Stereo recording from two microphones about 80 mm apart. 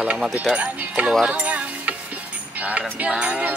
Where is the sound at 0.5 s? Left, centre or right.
Centre.